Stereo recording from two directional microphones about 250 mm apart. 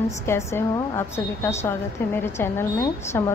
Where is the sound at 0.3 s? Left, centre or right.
Centre.